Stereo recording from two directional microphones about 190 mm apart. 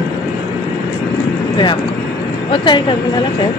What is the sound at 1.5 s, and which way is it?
Speech, 25° left (ahead or behind).